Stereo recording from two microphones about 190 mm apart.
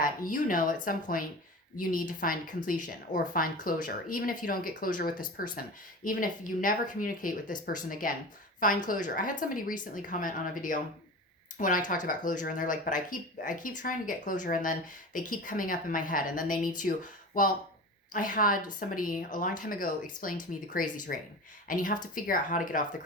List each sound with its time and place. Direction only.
0.0 s speech: 45° left (ahead or behind)